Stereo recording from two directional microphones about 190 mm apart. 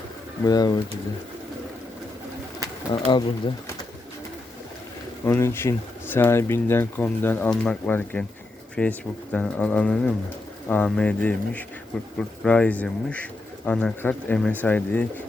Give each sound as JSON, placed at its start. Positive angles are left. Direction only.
{"t": 0.4, "sound": "speech", "side_deg": 20}
{"t": 2.9, "sound": "speech", "side_deg": 25}
{"t": 5.2, "sound": "speech", "side_deg": 15}